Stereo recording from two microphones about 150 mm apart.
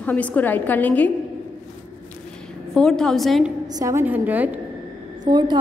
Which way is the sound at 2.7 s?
5° left (ahead or behind).